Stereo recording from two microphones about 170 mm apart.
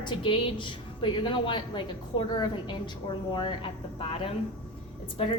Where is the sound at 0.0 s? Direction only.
30° left (ahead or behind).